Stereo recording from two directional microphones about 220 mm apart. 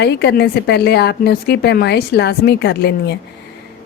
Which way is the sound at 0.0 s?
50° left (ahead or behind).